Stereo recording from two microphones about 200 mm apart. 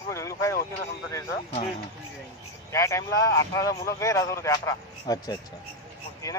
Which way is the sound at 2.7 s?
15° left (ahead or behind).